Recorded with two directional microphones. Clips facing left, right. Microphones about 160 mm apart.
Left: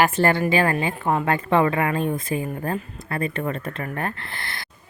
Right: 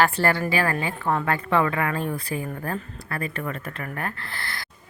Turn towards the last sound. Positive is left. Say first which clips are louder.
# even
turn(degrees=25)  # may be behind; listen again after turning